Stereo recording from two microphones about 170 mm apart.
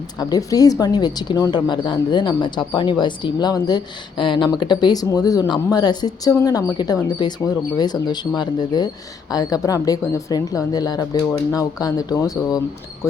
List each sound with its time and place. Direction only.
0.2 s a woman's voice: 20° left (ahead or behind)